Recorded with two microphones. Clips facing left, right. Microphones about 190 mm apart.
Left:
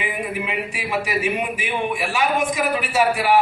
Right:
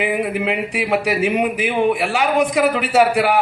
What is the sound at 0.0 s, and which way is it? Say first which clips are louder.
Speech: right 7 dB; 65° right (ahead or behind).